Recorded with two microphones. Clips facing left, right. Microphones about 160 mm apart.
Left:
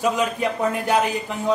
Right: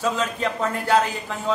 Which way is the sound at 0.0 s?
15° left (ahead or behind).